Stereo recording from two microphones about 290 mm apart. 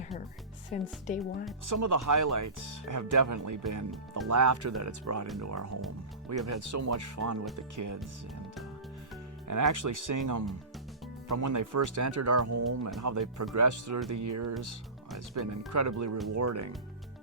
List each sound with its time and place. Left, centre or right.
0.7 s speech: left
1.7 s speech: right
9.5 s speech: right
13.0 s speech: right
14.1 s speech: right
15.4 s speech: right